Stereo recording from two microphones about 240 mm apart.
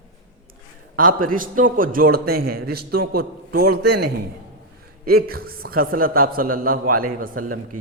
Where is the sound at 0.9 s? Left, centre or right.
Right.